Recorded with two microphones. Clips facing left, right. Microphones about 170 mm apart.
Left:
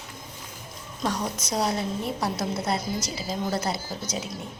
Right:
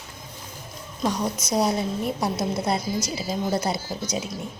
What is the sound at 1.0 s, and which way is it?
A woman's voice, 15° right (ahead or behind).